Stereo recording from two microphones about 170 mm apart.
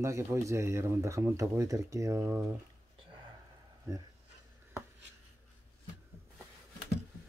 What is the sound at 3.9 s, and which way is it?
Speech, 15° right (ahead or behind).